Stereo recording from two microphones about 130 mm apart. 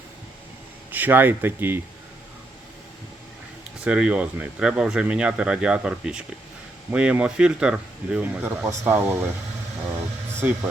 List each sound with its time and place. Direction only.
0.9 s speech: 15° right (ahead or behind)
3.8 s speech: 5° right (ahead or behind)
10.4 s speech: 10° right (ahead or behind)